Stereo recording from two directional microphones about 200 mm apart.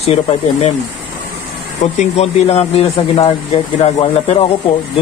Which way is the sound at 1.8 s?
35° left (ahead or behind).